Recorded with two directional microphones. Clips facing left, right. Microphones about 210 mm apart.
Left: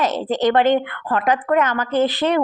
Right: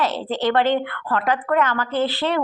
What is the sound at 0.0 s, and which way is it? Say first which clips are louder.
A woman's voice: left 3 dB; 20° left (ahead or behind).